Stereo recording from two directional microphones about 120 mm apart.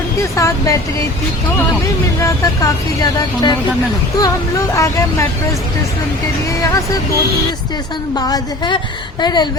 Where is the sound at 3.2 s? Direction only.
35° left (ahead or behind).